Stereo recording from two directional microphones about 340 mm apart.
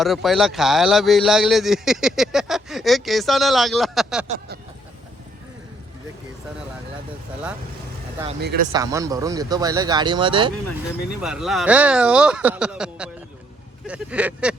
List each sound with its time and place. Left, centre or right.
0.0 s speech: centre
8.4 s speech: right
8.7 s speech: centre
11.2 s speech: centre